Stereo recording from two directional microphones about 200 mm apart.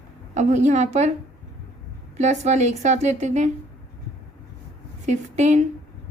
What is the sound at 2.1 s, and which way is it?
A woman's voice, 35° right (ahead or behind).